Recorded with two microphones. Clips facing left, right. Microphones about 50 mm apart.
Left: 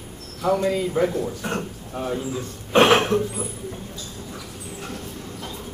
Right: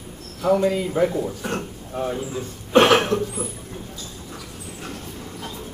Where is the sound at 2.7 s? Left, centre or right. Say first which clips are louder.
Right 1 dB; left.